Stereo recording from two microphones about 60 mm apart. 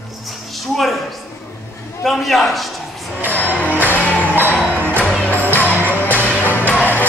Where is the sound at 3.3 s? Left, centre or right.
Left.